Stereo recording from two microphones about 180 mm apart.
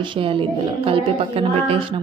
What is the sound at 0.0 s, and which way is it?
A woman's voice, 30° right (ahead or behind).